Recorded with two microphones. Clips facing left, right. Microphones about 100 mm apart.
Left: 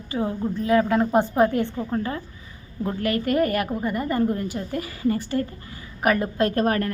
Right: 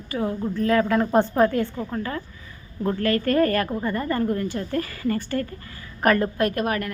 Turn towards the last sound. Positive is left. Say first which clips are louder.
# left 2 dB
turn(degrees=35)  # may be behind; listen again after turning